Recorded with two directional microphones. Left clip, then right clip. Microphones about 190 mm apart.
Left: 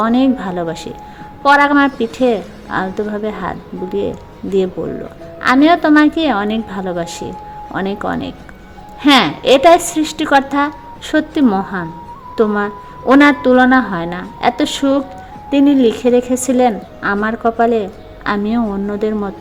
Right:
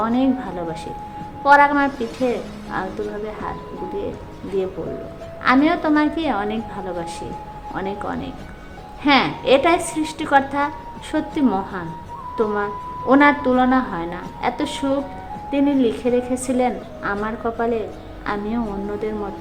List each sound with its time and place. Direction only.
0.0 s a woman's voice: 35° left (ahead or behind)
5.4 s a woman's voice: 35° left (ahead or behind)